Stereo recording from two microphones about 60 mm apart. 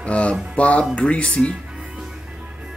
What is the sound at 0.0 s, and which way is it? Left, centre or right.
Speech, left.